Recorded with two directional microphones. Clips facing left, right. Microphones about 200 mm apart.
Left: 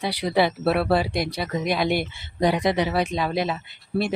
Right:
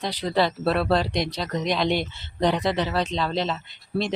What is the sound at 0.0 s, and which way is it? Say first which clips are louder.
Speech: left 2 dB; 10° left (ahead or behind).